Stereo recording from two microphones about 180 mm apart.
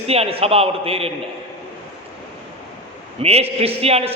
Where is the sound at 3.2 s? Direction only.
35° right (ahead or behind).